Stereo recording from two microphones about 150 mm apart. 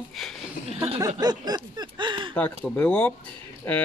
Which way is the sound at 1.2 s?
25° right (ahead or behind).